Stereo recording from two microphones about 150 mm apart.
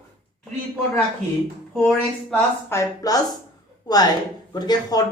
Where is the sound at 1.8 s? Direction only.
10° left (ahead or behind).